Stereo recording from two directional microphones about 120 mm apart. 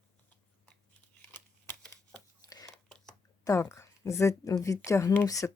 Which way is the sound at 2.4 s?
30° left (ahead or behind).